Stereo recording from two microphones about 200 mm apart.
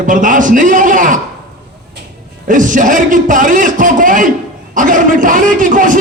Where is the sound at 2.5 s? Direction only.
40° right (ahead or behind).